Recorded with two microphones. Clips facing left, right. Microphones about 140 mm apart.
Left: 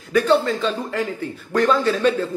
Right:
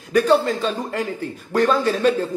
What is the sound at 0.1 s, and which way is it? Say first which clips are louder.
Speech: right 1 dB; 40° right (ahead or behind).